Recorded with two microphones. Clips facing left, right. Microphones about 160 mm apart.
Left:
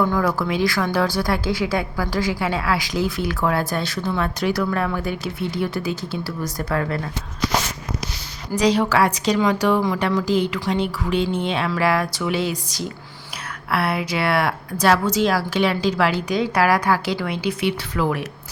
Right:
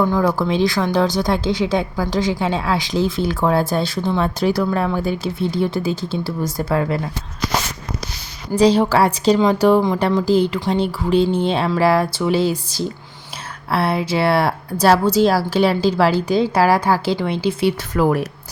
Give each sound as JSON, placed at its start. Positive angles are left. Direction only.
{"t": 0.0, "sound": "a woman's voice", "side_deg": -20}
{"t": 8.5, "sound": "a woman's voice", "side_deg": -30}
{"t": 17.9, "sound": "a woman's voice", "side_deg": -40}